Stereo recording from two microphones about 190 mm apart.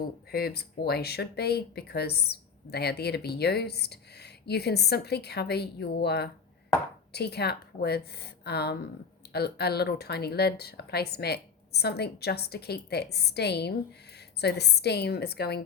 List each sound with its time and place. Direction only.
0.3 s speech: 55° left (ahead or behind)